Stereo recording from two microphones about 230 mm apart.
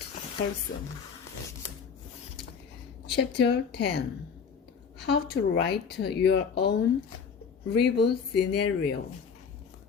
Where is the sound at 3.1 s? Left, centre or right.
Left.